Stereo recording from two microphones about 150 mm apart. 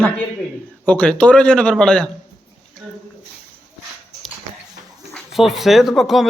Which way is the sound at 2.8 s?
Centre (ahead or behind).